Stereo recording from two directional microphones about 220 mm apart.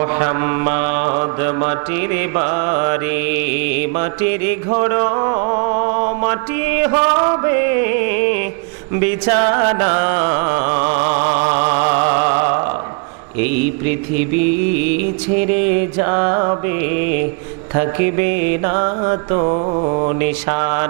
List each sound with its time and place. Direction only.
0.0 s mantra: 20° right (ahead or behind)
4.2 s music: 15° right (ahead or behind)
4.7 s mantra: 25° right (ahead or behind)
6.7 s music: 15° right (ahead or behind)
9.0 s mantra: 10° right (ahead or behind)
10.9 s music: 25° right (ahead or behind)
16.0 s mantra: 25° right (ahead or behind)
18.3 s mantra: 55° right (ahead or behind)
18.6 s mantra: 25° right (ahead or behind)